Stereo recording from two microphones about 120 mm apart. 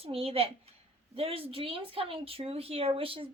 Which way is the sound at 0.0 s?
55° right (ahead or behind).